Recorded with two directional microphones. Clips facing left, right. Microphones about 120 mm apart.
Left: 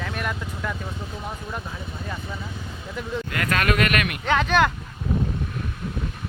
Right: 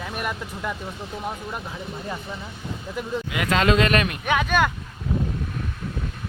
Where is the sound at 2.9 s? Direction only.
15° right (ahead or behind).